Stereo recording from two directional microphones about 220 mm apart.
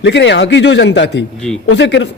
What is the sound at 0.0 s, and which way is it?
Speech, 55° left (ahead or behind).